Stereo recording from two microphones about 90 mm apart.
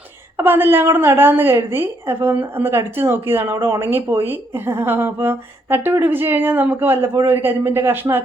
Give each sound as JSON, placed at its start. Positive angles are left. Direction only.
{"t": 0.3, "sound": "a woman's voice", "side_deg": -25}